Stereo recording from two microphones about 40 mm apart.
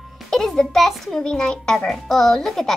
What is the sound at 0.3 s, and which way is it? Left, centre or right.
Speech, centre.